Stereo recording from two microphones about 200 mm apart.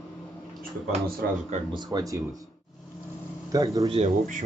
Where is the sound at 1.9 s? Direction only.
20° right (ahead or behind).